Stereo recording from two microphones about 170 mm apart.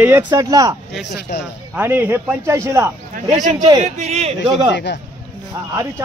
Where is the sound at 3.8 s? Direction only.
40° right (ahead or behind).